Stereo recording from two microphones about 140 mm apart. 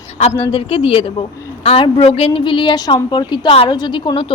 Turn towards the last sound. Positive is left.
turn(degrees=35)  # may be behind; listen again after turning